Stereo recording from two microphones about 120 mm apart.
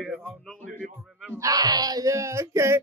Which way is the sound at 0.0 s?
Centre (ahead or behind).